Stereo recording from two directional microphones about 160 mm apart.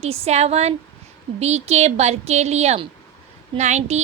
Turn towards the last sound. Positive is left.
turn(degrees=-45)  # may be behind; listen again after turning